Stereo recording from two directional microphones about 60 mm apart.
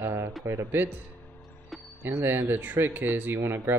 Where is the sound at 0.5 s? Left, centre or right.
Right.